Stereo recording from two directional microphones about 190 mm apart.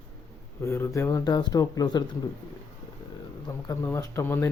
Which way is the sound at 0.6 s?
15° left (ahead or behind).